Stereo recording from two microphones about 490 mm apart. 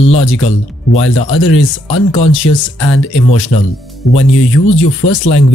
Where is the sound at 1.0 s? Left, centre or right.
Left.